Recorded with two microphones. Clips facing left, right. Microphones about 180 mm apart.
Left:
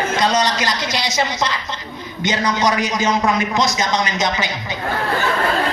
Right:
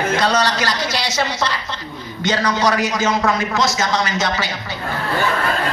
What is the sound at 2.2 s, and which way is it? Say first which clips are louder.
A man's voice: right 1 dB; 15° left (ahead or behind).